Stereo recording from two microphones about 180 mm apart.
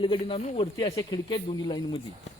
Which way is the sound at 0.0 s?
30° left (ahead or behind).